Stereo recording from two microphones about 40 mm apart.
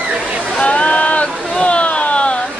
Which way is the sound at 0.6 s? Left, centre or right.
Left.